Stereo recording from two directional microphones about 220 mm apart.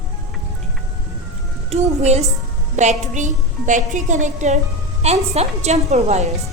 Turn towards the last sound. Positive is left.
turn(degrees=-30)  # may be behind; listen again after turning